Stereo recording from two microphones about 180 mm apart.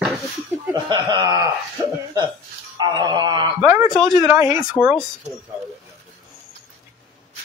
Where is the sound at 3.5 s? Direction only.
10° right (ahead or behind).